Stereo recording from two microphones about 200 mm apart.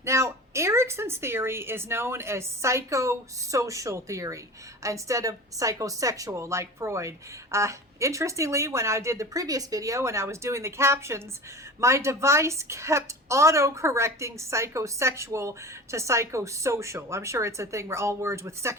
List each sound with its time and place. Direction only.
0.0 s a woman's voice: 15° right (ahead or behind)